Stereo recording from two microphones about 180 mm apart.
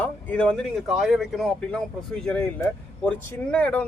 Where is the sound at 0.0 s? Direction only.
5° left (ahead or behind).